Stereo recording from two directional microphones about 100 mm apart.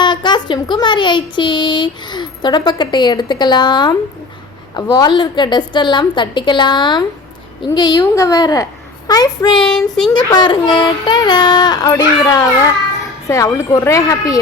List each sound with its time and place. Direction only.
0.0 s a woman's voice: 50° left (ahead or behind)
9.6 s child singing: 5° left (ahead or behind)
10.2 s a woman's voice: 50° left (ahead or behind)